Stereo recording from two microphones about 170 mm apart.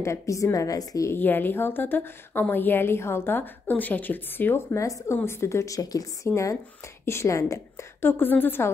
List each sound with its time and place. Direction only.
0.0 s a woman's voice: 20° left (ahead or behind)